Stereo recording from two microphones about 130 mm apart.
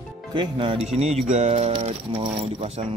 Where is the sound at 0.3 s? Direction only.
40° right (ahead or behind).